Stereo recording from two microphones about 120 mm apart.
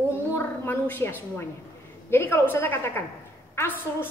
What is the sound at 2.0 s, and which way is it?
A woman's voice, 20° left (ahead or behind).